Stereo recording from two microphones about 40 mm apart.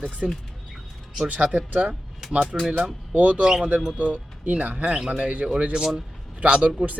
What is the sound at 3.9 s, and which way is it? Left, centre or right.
Speech, right.